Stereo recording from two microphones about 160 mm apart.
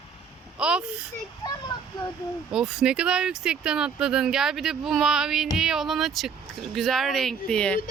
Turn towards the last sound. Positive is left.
turn(degrees=5)  # may be behind; listen again after turning